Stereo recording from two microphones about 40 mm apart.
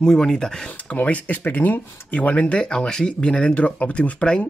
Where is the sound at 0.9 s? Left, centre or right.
Left.